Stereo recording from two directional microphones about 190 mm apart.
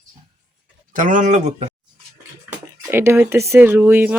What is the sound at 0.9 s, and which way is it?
Speech, 40° right (ahead or behind).